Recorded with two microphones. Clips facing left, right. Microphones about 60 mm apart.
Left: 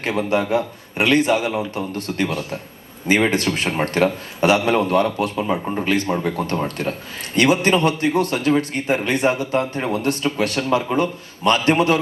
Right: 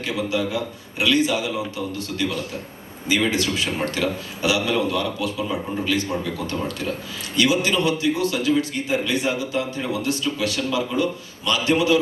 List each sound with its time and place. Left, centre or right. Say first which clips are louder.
0.0 s a man's voice: left 4 dB; left